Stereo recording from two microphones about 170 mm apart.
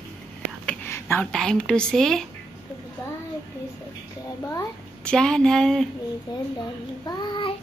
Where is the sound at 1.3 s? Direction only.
5° left (ahead or behind).